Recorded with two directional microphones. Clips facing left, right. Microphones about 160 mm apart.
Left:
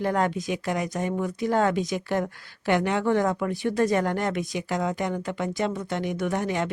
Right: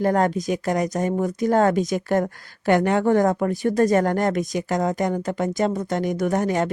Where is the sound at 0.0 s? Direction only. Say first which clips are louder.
Right 5 dB; 40° right (ahead or behind).